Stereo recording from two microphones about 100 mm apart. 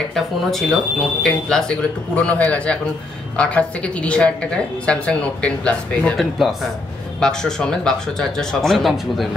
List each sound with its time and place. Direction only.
0.1 s a woman's voice: centre (ahead or behind)
6.1 s speech: centre (ahead or behind)